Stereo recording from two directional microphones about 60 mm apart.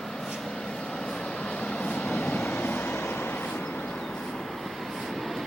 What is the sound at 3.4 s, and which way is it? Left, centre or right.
Vehicle, left.